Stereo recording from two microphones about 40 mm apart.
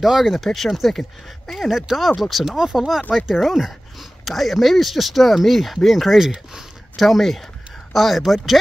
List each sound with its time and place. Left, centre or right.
0.0 s speech: centre
2.4 s speech: centre
6.1 s speech: centre
7.0 s speech: centre